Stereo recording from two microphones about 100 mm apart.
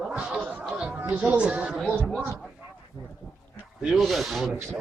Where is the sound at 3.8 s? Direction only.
Centre (ahead or behind).